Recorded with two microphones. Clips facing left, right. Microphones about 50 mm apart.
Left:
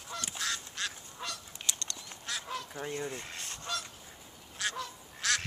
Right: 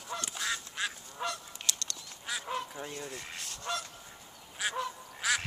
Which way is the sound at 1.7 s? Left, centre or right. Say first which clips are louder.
Even; left.